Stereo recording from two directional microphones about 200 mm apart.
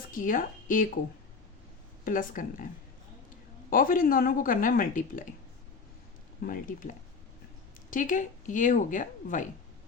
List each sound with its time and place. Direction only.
0.1 s speech: 45° left (ahead or behind)
2.0 s speech: 45° left (ahead or behind)
3.7 s speech: 45° left (ahead or behind)
6.4 s speech: 45° left (ahead or behind)